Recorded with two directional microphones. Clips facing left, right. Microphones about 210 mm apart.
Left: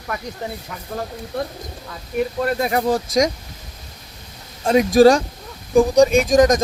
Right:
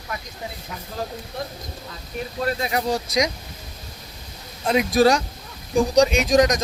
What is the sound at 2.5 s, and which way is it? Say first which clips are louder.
Speech: left 2 dB; 50° left (ahead or behind).